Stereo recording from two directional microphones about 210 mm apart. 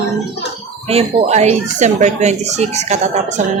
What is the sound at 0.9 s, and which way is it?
Speech, 30° right (ahead or behind).